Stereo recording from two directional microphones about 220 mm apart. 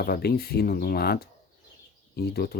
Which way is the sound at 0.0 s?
45° left (ahead or behind).